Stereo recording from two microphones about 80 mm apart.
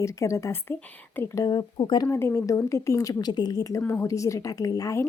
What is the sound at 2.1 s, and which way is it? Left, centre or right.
A woman's voice, left.